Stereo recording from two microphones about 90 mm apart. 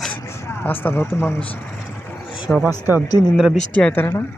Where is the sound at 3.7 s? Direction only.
10° left (ahead or behind).